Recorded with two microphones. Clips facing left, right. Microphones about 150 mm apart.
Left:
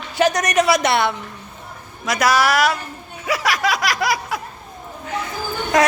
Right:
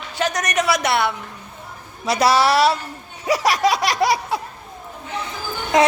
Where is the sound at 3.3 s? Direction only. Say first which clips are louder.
Right 3 dB; 35° right (ahead or behind).